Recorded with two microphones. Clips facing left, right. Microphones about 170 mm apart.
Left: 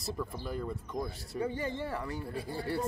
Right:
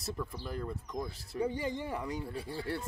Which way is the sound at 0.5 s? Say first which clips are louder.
Left 2 dB; centre (ahead or behind).